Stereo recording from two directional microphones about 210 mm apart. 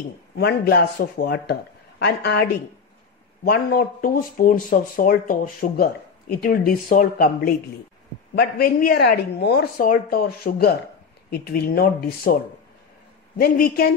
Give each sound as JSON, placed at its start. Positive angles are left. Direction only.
{"t": 0.4, "sound": "speech", "side_deg": 45}
{"t": 13.4, "sound": "speech", "side_deg": 45}